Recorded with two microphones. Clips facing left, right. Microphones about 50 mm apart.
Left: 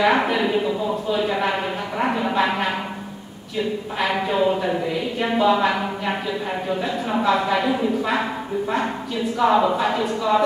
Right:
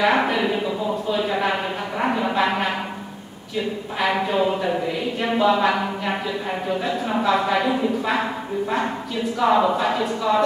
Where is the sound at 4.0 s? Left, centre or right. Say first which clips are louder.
Even; centre.